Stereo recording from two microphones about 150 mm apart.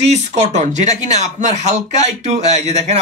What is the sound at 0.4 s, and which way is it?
Speech, 50° right (ahead or behind).